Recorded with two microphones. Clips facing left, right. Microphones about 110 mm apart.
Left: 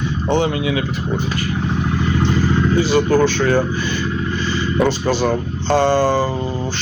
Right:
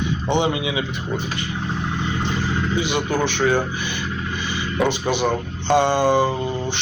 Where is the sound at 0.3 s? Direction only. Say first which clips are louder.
Left 4 dB; 20° right (ahead or behind).